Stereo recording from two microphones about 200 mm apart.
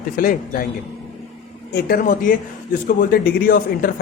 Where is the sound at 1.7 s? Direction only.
50° left (ahead or behind).